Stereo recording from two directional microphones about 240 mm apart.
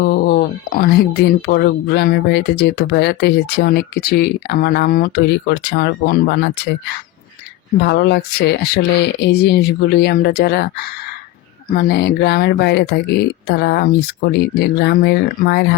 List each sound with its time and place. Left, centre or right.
0.0 s speech: left
7.8 s speech: left
11.7 s speech: left